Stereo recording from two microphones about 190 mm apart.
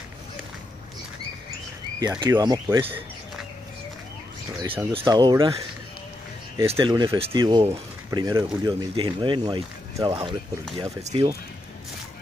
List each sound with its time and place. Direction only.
2.0 s speech: 20° right (ahead or behind)
4.6 s speech: 15° right (ahead or behind)
6.6 s speech: 30° right (ahead or behind)